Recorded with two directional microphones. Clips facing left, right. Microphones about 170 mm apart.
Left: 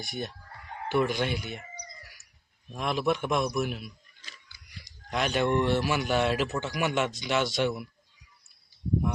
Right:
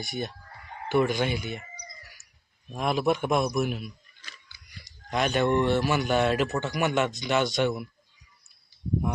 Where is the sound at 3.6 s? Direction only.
Centre (ahead or behind).